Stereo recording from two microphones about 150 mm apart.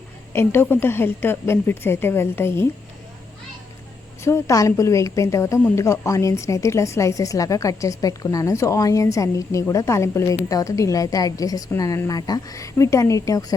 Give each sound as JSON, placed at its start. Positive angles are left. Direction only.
{"t": 0.3, "sound": "a woman's voice", "side_deg": 15}
{"t": 4.2, "sound": "a woman's voice", "side_deg": 20}